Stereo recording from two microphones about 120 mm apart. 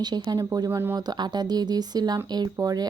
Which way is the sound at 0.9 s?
35° right (ahead or behind).